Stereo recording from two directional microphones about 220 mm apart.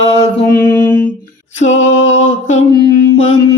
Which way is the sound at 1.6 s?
30° left (ahead or behind).